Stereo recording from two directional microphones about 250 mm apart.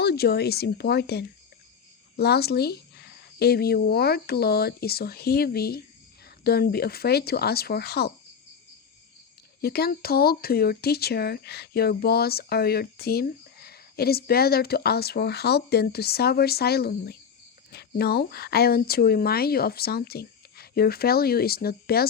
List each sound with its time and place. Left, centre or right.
0.0 s speech: left
9.6 s speech: left